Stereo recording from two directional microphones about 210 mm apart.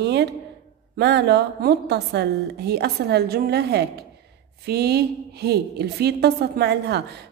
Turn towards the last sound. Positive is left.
turn(degrees=-55)  # may be behind; listen again after turning